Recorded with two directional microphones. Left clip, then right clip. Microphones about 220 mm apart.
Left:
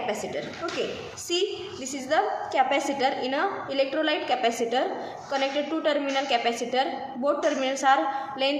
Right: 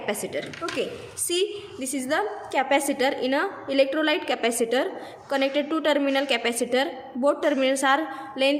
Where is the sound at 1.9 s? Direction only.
55° right (ahead or behind).